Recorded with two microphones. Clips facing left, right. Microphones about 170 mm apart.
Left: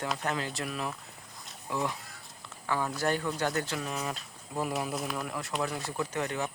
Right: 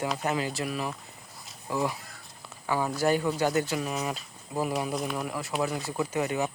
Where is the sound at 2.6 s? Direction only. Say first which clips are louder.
Right 4 dB; 10° right (ahead or behind).